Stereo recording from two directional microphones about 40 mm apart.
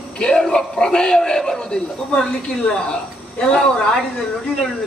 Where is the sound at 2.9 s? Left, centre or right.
Left.